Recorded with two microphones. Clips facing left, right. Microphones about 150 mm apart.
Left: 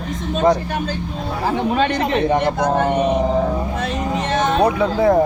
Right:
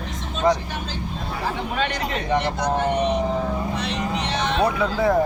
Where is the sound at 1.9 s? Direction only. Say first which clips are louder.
Left 6 dB; 50° left (ahead or behind).